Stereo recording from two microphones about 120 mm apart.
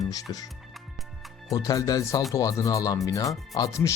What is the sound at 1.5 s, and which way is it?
Speech, 30° left (ahead or behind).